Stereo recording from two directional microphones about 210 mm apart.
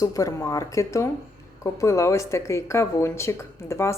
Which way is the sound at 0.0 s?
15° left (ahead or behind).